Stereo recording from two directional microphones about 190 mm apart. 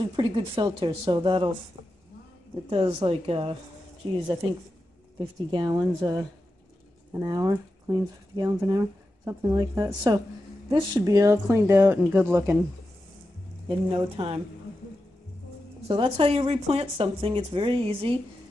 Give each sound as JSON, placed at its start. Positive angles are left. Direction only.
{"t": 0.0, "sound": "speech", "side_deg": -25}
{"t": 2.7, "sound": "speech", "side_deg": -30}
{"t": 5.5, "sound": "a woman's voice", "side_deg": -25}
{"t": 13.7, "sound": "speech", "side_deg": -30}
{"t": 15.9, "sound": "speech", "side_deg": -30}